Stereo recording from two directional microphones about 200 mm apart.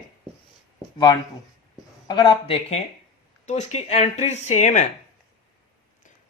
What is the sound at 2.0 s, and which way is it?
A man's voice, 25° left (ahead or behind).